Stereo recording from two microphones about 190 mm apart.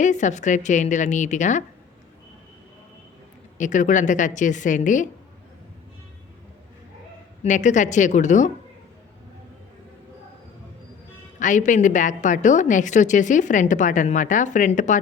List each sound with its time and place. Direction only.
0.0 s a woman's voice: 40° left (ahead or behind)
3.6 s a woman's voice: 40° left (ahead or behind)
7.4 s a woman's voice: 40° left (ahead or behind)
11.3 s a woman's voice: 40° left (ahead or behind)